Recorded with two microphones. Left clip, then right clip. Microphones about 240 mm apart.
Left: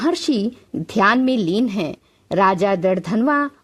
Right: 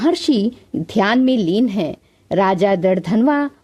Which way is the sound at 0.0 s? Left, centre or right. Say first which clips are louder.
Right 3 dB; centre.